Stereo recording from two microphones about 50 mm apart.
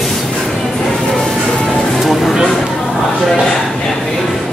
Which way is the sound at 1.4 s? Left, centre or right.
Centre.